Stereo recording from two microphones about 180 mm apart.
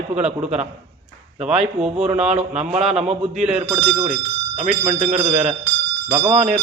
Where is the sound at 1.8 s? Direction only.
35° right (ahead or behind).